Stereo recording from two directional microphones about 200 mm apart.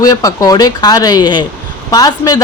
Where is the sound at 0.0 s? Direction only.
15° left (ahead or behind).